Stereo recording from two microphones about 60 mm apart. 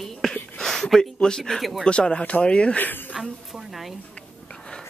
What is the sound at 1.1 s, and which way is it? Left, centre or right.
Speech, centre.